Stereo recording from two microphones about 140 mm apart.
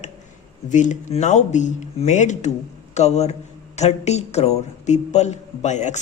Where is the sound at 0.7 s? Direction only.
60° left (ahead or behind).